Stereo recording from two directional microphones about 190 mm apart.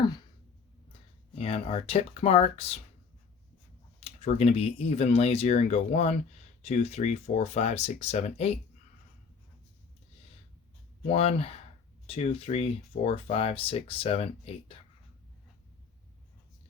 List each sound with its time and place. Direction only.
1.4 s speech: 30° left (ahead or behind)
4.0 s speech: 35° left (ahead or behind)
11.1 s speech: 35° left (ahead or behind)